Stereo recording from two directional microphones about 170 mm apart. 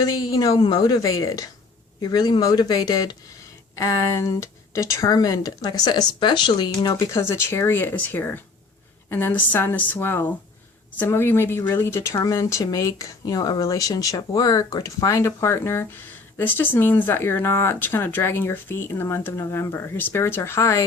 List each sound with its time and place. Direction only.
0.0 s a woman's voice: 25° left (ahead or behind)